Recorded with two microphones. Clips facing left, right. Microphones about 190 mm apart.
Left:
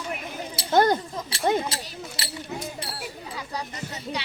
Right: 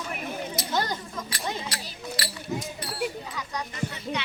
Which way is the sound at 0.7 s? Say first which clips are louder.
Left 10 dB; 55° left (ahead or behind).